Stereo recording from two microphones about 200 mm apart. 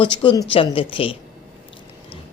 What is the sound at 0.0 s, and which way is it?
Speech, 25° left (ahead or behind).